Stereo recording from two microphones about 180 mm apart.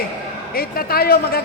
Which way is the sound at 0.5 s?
55° left (ahead or behind).